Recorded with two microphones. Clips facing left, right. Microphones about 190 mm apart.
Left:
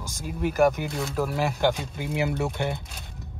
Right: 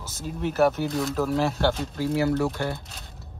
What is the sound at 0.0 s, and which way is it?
Speech, 10° left (ahead or behind).